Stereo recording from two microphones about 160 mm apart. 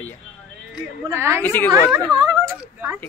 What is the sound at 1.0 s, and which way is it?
Speech, 15° right (ahead or behind).